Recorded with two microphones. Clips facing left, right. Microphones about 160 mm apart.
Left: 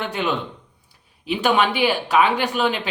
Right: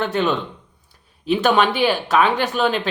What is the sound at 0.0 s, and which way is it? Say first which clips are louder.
Speech: right 4 dB; 15° left (ahead or behind).